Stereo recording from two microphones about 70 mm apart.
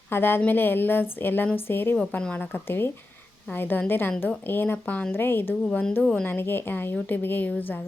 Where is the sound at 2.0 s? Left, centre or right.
Centre; by 5.5 s left.